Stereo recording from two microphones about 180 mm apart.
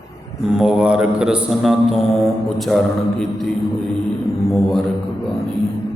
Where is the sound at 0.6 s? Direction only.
5° right (ahead or behind).